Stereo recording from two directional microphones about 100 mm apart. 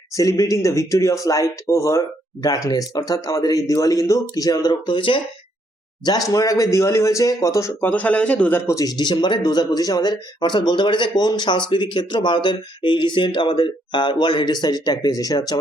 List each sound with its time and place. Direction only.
0.1 s speech: 35° left (ahead or behind); by 5.2 s 60° left (ahead or behind)
6.1 s speech: 35° left (ahead or behind)
7.9 s a man's voice: 15° left (ahead or behind)
8.7 s speech: 40° left (ahead or behind)